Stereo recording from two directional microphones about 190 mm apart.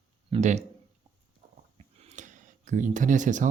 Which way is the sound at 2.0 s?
40° right (ahead or behind).